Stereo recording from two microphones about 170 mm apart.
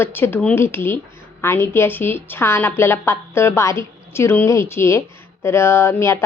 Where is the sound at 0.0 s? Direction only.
10° left (ahead or behind).